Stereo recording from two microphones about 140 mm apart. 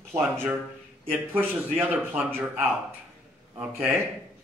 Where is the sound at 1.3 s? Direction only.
15° right (ahead or behind).